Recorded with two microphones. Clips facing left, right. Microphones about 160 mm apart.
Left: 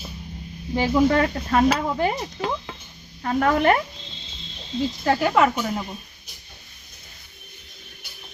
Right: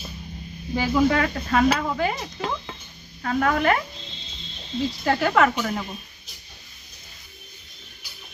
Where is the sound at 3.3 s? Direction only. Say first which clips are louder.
Left 2 dB; 30° left (ahead or behind).